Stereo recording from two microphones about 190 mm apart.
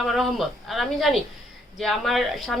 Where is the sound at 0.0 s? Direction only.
Centre (ahead or behind).